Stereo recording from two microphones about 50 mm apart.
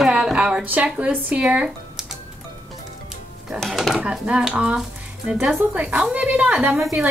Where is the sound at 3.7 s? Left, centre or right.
Centre.